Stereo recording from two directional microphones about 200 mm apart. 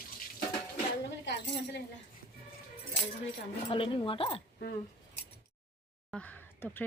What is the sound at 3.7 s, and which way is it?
Speech, 25° left (ahead or behind).